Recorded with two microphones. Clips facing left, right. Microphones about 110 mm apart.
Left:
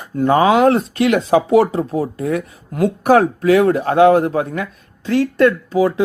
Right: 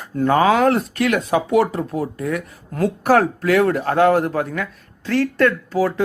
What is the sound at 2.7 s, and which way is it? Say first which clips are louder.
Speech: left 3 dB; 15° left (ahead or behind).